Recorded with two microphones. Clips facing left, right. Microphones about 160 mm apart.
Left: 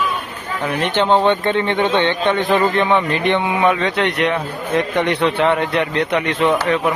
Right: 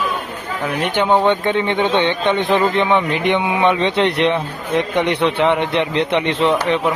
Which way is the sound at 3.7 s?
30° right (ahead or behind).